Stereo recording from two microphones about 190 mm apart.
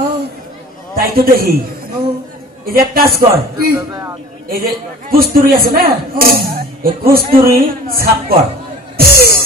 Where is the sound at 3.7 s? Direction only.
15° right (ahead or behind).